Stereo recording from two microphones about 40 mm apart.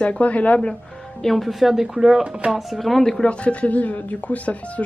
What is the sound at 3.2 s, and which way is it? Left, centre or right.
Speech, left.